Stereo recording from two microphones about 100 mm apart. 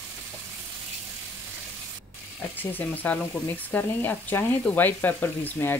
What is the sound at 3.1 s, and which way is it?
Frying, 15° left (ahead or behind).